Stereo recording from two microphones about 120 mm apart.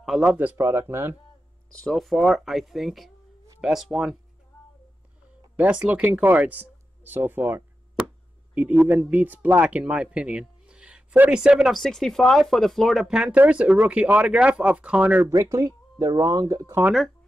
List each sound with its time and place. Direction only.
0.0 s a man's voice: 5° right (ahead or behind); by 1.1 s 20° right (ahead or behind)
1.8 s speech: 5° left (ahead or behind)
5.6 s a man's voice: 10° right (ahead or behind)
15.3 s speech: 25° right (ahead or behind)